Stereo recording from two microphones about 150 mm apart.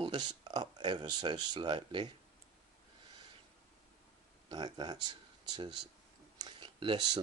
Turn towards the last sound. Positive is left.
turn(degrees=-30)  # may be behind; listen again after turning